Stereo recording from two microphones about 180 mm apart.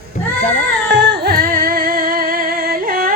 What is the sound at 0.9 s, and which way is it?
Music, 70° right (ahead or behind).